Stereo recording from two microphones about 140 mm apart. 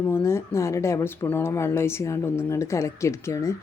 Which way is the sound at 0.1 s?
20° left (ahead or behind).